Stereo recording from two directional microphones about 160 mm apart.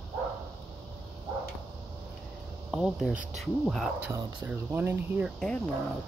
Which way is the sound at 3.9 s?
15° right (ahead or behind).